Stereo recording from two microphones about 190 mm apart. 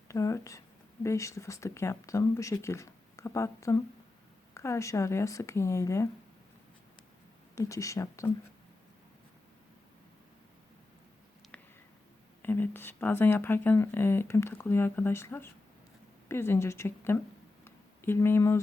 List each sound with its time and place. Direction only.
0.1 s speech: 15° left (ahead or behind)
7.5 s speech: 15° left (ahead or behind)
11.5 s a sound: 5° left (ahead or behind)
12.4 s speech: 10° left (ahead or behind)